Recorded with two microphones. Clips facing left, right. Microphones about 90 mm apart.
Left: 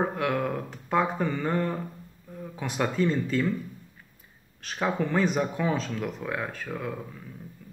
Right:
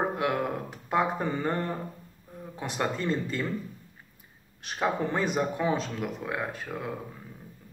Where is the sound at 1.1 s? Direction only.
30° right (ahead or behind).